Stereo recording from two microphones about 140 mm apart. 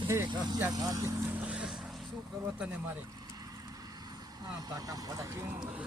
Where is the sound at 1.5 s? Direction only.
5° right (ahead or behind).